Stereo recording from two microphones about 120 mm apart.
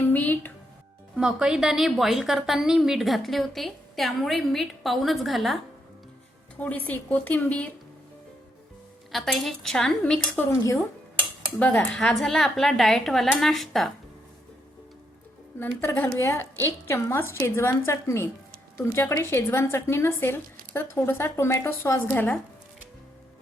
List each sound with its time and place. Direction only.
0.0 s music: 15° left (ahead or behind)
1.1 s a woman's voice: 5° right (ahead or behind)
6.6 s a woman's voice: 15° left (ahead or behind)
9.1 s a woman's voice: centre (ahead or behind)
11.6 s a woman's voice: 5° left (ahead or behind)
15.5 s speech: 20° left (ahead or behind)